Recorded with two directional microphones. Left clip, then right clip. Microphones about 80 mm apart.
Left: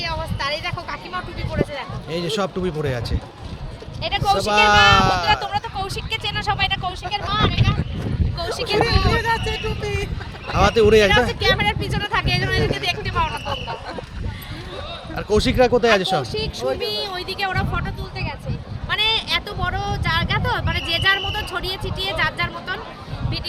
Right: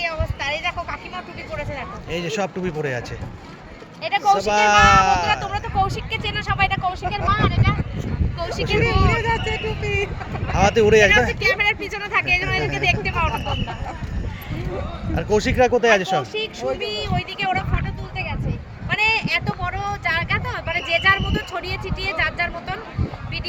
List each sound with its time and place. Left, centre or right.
0.0 s speech: centre
2.0 s speech: left
4.0 s speech: left
7.2 s speech: left
9.0 s speech: centre
10.5 s speech: left
15.1 s speech: left
16.3 s speech: centre